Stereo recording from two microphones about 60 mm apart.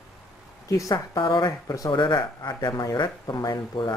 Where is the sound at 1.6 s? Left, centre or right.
Left.